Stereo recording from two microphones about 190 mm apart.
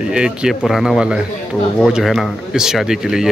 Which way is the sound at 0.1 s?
5° right (ahead or behind).